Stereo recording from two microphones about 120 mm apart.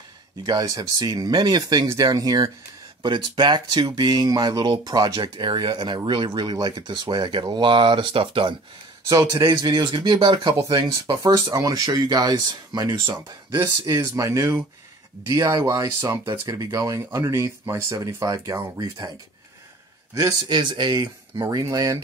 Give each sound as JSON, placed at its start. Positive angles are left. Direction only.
{"t": 0.5, "sound": "speech", "side_deg": -35}
{"t": 9.3, "sound": "speech", "side_deg": -30}
{"t": 11.3, "sound": "speech", "side_deg": -25}
{"t": 13.6, "sound": "speech", "side_deg": -25}
{"t": 20.4, "sound": "speech", "side_deg": -40}